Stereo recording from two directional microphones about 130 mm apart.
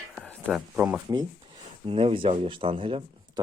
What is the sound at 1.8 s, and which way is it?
Speech, 45° right (ahead or behind).